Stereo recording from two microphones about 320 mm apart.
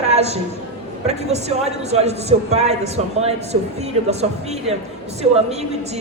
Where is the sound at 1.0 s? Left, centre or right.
Centre.